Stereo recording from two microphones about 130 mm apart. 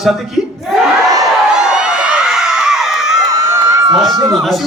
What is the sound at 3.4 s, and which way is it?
Crowd, 25° right (ahead or behind).